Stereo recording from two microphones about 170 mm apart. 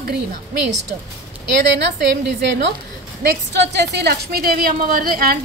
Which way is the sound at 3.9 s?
70° right (ahead or behind).